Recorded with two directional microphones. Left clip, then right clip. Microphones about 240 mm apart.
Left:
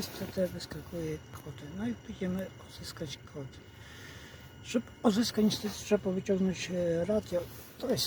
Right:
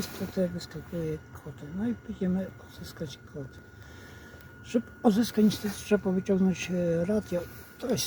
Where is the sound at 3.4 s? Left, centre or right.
Centre.